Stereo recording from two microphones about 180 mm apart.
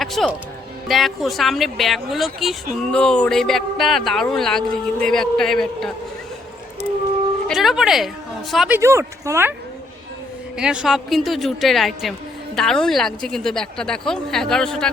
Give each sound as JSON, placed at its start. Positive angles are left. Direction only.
{"t": 0.0, "sound": "speech", "side_deg": 0}
{"t": 7.4, "sound": "a woman's voice", "side_deg": 0}
{"t": 8.8, "sound": "speech", "side_deg": -15}
{"t": 10.6, "sound": "speech", "side_deg": -5}